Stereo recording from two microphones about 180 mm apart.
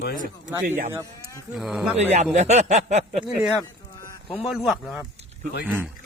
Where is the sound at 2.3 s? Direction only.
40° right (ahead or behind).